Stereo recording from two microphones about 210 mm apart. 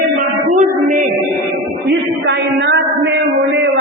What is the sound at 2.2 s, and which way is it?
Speech, 60° right (ahead or behind).